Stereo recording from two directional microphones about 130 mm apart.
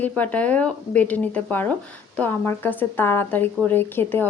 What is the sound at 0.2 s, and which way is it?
A woman's voice, 10° left (ahead or behind).